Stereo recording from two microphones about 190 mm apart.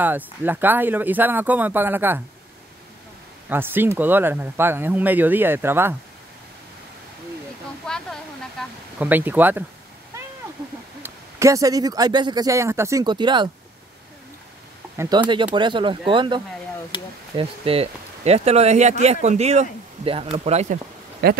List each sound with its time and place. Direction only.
0.0 s speech: 10° right (ahead or behind)
3.4 s speech: 10° right (ahead or behind)
7.8 s a sound: 5° left (ahead or behind)
8.9 s speech: 10° right (ahead or behind)
11.0 s speech: 15° right (ahead or behind)
15.0 s speech: 25° right (ahead or behind); by 21.4 s 50° right (ahead or behind)